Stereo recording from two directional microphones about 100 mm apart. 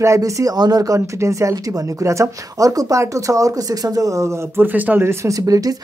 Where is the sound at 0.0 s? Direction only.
30° right (ahead or behind).